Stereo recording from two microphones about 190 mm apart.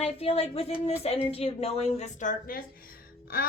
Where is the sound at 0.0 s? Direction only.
30° left (ahead or behind).